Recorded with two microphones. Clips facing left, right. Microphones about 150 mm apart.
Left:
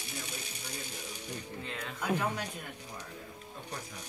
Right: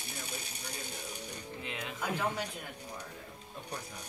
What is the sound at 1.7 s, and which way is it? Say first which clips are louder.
Speech: left 3 dB; 10° right (ahead or behind).